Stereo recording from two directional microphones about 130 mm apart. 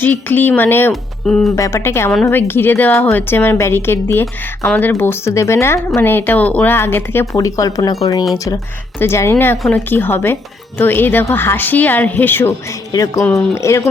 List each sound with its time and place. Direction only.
0.0 s speech: 15° left (ahead or behind)
1.3 s speech: 5° left (ahead or behind)
1.5 s speech: 20° left (ahead or behind)
9.0 s speech: 20° left (ahead or behind)
12.9 s speech: 30° left (ahead or behind)